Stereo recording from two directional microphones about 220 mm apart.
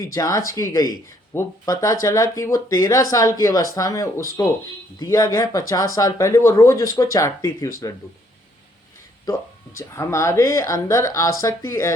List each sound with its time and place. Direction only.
0.0 s speech: 15° left (ahead or behind)
9.7 s speech: 15° left (ahead or behind)